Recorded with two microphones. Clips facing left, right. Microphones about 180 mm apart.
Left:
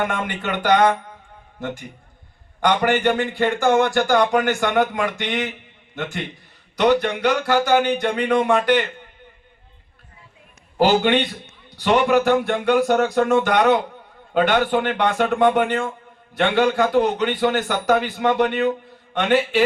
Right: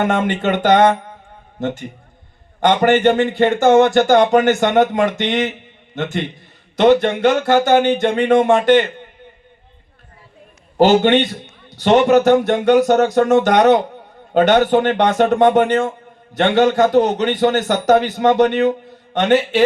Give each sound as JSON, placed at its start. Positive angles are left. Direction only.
{"t": 0.1, "sound": "speech", "side_deg": -25}
{"t": 10.8, "sound": "a man's voice", "side_deg": -25}
{"t": 11.0, "sound": "speech", "side_deg": -45}
{"t": 11.7, "sound": "a man's voice", "side_deg": -20}
{"t": 13.0, "sound": "speech", "side_deg": -40}